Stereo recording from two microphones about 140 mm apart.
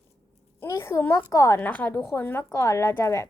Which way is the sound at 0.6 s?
20° left (ahead or behind).